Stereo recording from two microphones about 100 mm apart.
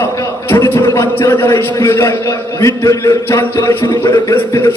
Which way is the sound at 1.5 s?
30° left (ahead or behind).